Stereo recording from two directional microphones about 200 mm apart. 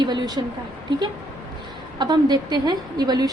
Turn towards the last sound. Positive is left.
turn(degrees=-20)  # may be behind; listen again after turning